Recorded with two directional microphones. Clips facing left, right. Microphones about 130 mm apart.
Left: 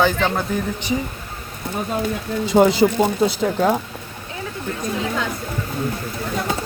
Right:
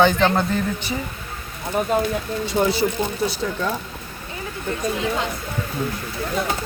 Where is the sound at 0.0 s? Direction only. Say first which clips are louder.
Right 2 dB; 5° left (ahead or behind).